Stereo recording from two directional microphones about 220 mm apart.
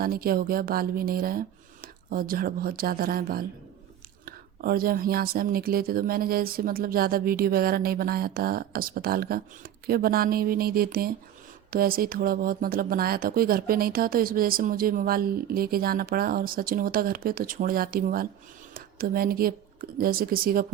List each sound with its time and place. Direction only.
0.0 s a woman's voice: 40° right (ahead or behind)